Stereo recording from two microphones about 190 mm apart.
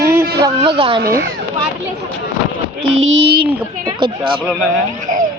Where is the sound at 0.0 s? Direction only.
15° right (ahead or behind).